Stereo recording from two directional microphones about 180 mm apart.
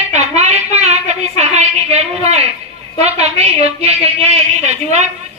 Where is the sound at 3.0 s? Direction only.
35° right (ahead or behind).